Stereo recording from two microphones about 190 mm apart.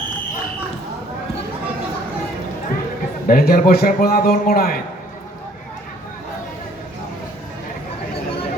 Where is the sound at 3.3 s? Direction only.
50° left (ahead or behind).